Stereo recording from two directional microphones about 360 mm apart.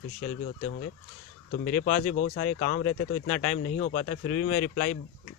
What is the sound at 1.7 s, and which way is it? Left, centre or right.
A man's voice, left.